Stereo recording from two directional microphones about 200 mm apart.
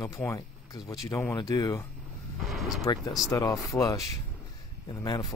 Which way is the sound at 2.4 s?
Centre (ahead or behind).